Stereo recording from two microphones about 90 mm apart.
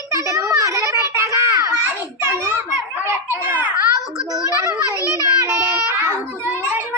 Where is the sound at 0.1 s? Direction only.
35° right (ahead or behind).